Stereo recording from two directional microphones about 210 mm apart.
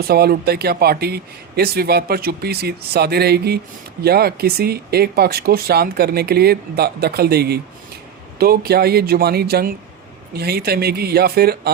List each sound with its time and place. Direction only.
0.1 s speech: 45° right (ahead or behind)